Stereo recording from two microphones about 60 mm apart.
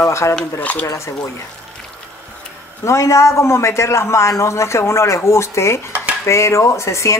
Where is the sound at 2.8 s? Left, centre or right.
Left.